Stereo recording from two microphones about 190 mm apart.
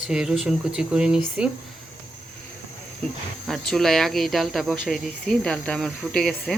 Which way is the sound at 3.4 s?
Centre (ahead or behind).